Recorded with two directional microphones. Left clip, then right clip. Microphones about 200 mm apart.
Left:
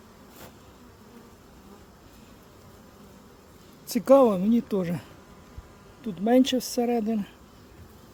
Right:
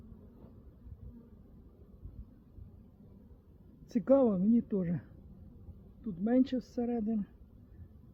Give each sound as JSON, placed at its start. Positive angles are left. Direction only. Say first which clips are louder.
{"t": 3.8, "sound": "speech", "louder": "left 9 dB", "side_deg": 5}
{"t": 6.2, "sound": "speech", "louder": "left 9 dB", "side_deg": 25}